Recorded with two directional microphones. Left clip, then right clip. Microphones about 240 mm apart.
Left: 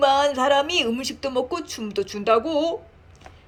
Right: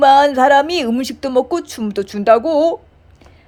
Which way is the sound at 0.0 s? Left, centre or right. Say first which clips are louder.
Right 9 dB; right.